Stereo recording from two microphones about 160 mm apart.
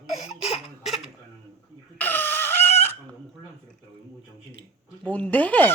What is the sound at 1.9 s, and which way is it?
Dog, 10° left (ahead or behind).